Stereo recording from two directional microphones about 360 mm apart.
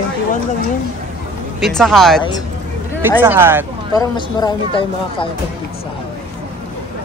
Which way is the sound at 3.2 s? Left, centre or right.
Centre.